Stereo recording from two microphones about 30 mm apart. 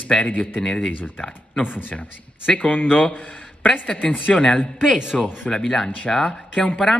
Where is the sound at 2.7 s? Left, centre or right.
Left.